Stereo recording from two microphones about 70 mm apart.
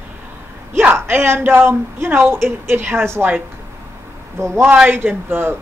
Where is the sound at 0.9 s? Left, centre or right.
Right.